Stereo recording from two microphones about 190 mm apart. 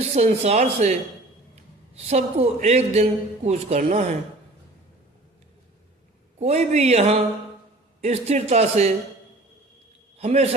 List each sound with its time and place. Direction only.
0.2 s a man's voice: 35° right (ahead or behind)
2.0 s a man's voice: 35° right (ahead or behind)
6.4 s a man's voice: 35° right (ahead or behind)
10.2 s a man's voice: 35° right (ahead or behind)